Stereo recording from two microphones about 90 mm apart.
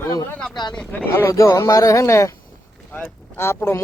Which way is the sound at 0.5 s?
55° left (ahead or behind).